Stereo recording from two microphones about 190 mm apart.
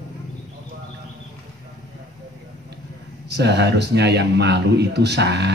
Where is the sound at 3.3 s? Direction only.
65° right (ahead or behind).